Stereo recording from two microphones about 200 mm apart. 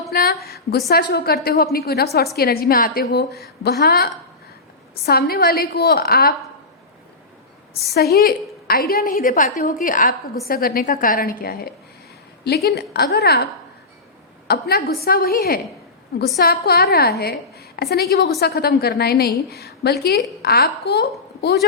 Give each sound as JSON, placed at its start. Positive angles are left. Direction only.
{"t": 0.1, "sound": "a sound", "side_deg": 50}
{"t": 0.9, "sound": "a woman's voice", "side_deg": 50}
{"t": 7.9, "sound": "a woman's voice", "side_deg": 50}